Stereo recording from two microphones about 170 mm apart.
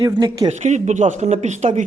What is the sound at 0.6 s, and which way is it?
A man's voice, 45° right (ahead or behind).